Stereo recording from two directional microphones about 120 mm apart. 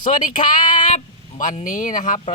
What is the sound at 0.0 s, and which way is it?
Female singing, 90° left.